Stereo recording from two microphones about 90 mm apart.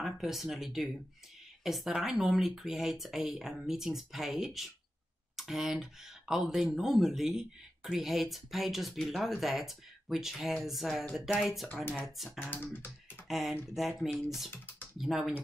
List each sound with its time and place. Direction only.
0.0 s speech: centre (ahead or behind)
12.3 s computer keyboard: 20° left (ahead or behind)
12.7 s speech: 25° left (ahead or behind)
13.3 s speech: 5° right (ahead or behind)